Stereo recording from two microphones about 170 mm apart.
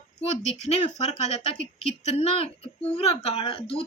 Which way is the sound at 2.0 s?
40° left (ahead or behind).